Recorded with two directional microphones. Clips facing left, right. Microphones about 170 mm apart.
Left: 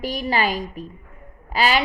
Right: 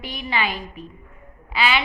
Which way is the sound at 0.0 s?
40° left (ahead or behind).